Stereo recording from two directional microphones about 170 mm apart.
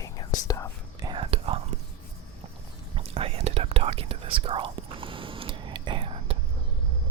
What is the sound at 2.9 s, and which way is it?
Whispering, 35° right (ahead or behind).